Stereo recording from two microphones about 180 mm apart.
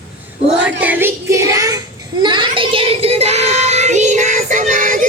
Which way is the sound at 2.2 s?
25° right (ahead or behind).